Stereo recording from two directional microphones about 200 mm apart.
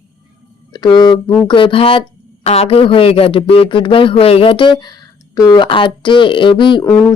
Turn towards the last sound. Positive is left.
turn(degrees=25)  # may be behind; listen again after turning